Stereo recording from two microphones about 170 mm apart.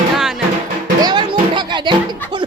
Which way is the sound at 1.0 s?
25° right (ahead or behind).